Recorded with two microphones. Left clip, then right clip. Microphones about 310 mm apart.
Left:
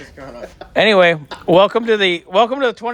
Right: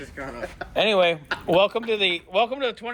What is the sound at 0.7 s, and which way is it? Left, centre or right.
Speech, left.